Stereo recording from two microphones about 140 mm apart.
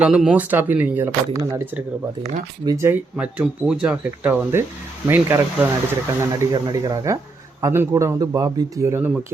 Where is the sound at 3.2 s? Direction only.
5° right (ahead or behind).